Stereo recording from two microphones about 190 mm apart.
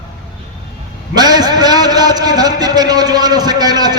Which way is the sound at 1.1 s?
20° right (ahead or behind).